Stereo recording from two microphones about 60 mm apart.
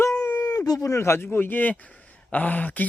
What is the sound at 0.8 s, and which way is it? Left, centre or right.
Speech, left.